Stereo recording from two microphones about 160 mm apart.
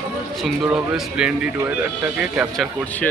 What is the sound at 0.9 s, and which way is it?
A man's voice, 5° right (ahead or behind).